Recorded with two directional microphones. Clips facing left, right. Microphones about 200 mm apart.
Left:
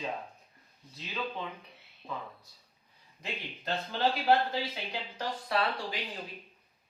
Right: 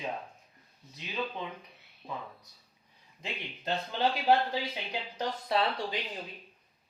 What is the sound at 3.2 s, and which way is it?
Speech, 20° right (ahead or behind).